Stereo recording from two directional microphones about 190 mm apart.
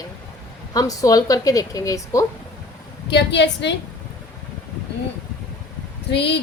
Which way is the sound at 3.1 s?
65° left (ahead or behind).